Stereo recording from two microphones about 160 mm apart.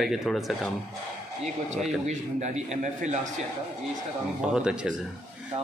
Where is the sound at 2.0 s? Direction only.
45° right (ahead or behind).